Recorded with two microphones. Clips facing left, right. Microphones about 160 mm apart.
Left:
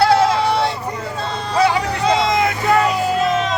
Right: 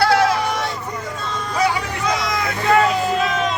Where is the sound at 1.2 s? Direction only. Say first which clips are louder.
Left 4 dB; 35° left (ahead or behind).